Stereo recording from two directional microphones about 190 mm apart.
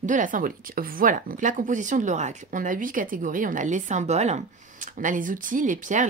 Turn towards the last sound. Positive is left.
turn(degrees=-40)  # may be behind; listen again after turning